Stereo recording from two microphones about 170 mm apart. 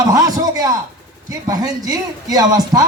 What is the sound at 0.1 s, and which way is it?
A man's voice, 20° right (ahead or behind).